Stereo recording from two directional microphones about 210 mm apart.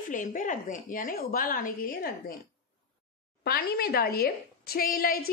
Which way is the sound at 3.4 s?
50° left (ahead or behind).